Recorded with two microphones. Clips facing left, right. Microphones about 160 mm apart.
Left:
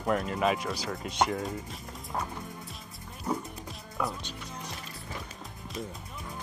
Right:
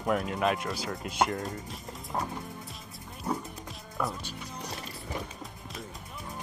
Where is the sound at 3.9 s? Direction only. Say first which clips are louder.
Even; centre (ahead or behind).